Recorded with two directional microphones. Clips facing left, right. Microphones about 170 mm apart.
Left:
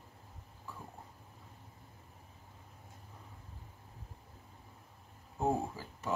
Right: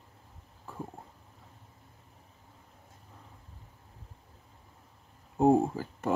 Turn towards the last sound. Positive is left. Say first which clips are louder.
# right 9 dB
turn(degrees=-55)  # may be behind; listen again after turning